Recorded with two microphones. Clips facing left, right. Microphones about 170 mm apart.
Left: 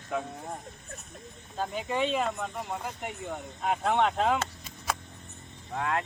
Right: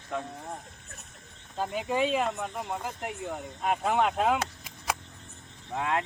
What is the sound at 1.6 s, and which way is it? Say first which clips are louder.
Speech: right 2 dB; 5° right (ahead or behind).